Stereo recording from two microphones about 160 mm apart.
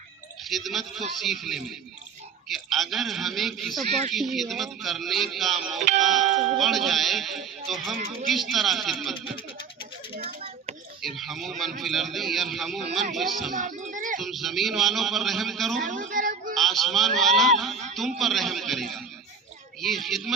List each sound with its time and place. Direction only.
0.4 s speech: centre (ahead or behind)
10.2 s a sound: 35° right (ahead or behind)
11.0 s speech: centre (ahead or behind)
13.6 s music: 50° right (ahead or behind)
14.2 s speech: centre (ahead or behind)
15.9 s a sound: 55° right (ahead or behind)
16.6 s speech: centre (ahead or behind)